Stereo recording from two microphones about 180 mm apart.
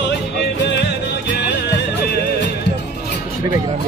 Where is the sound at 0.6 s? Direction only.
75° left (ahead or behind).